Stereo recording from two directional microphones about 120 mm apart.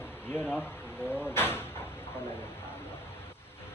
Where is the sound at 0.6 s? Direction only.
15° left (ahead or behind).